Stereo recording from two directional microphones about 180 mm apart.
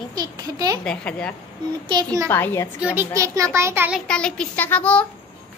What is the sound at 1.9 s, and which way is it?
Speech, 20° right (ahead or behind).